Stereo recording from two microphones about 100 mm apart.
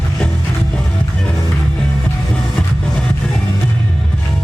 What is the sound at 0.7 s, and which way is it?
Music, 10° left (ahead or behind).